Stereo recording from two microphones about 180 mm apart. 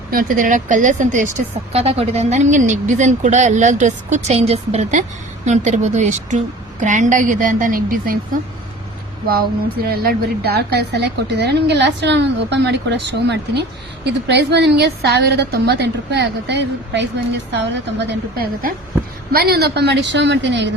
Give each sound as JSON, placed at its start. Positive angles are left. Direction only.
{"t": 0.1, "sound": "a woman's voice", "side_deg": -50}
{"t": 1.7, "sound": "a woman's voice", "side_deg": -35}
{"t": 18.1, "sound": "a woman's voice", "side_deg": -55}